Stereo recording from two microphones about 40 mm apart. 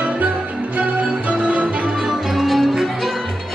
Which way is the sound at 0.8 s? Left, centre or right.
Right.